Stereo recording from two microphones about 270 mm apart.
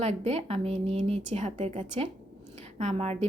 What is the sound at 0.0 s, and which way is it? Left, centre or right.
A woman's voice, right.